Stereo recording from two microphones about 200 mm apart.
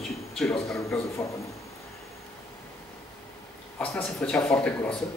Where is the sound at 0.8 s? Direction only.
15° left (ahead or behind).